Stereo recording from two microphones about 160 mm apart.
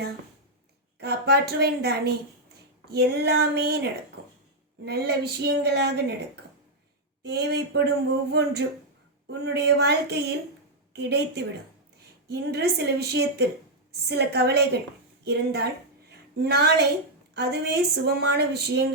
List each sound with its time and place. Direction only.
0.9 s a woman's voice: 90° right
4.9 s a woman's voice: 90° right